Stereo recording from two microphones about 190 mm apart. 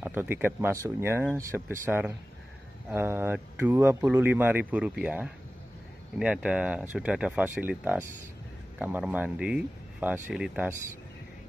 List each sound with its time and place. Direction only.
0.0 s speech: 10° right (ahead or behind)